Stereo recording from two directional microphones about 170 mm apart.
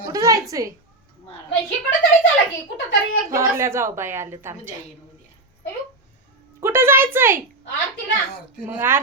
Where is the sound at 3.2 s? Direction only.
15° right (ahead or behind).